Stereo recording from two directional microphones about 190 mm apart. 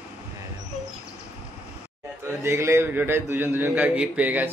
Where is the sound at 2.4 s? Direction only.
15° right (ahead or behind).